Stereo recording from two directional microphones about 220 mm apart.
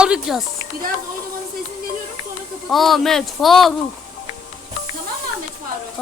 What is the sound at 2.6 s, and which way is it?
Speech, centre (ahead or behind).